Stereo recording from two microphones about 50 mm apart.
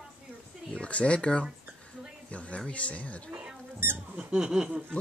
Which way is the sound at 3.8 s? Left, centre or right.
Right.